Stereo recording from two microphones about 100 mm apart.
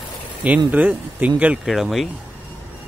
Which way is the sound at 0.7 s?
15° right (ahead or behind).